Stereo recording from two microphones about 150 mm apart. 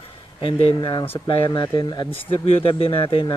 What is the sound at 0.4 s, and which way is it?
Speech, 40° left (ahead or behind).